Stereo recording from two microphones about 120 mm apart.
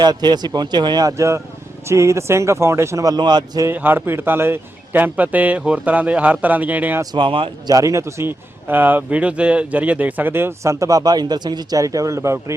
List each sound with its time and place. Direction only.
0.0 s a man's voice: 35° right (ahead or behind)
3.7 s speech: 15° right (ahead or behind)
7.0 s speech: 40° right (ahead or behind)
7.7 s a man's voice: 25° right (ahead or behind)